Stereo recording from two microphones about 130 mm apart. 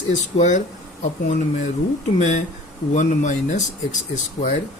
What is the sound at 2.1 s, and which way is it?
Speech, 70° left (ahead or behind).